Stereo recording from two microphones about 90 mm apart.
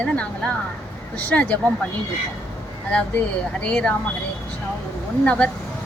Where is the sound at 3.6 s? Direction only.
10° left (ahead or behind).